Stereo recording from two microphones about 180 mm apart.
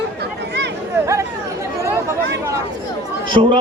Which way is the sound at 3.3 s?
25° right (ahead or behind).